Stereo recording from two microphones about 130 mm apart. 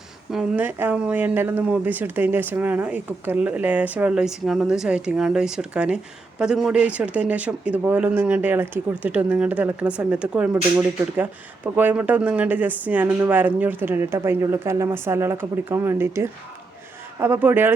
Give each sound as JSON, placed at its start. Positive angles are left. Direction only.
{"t": 0.3, "sound": "speech", "side_deg": -10}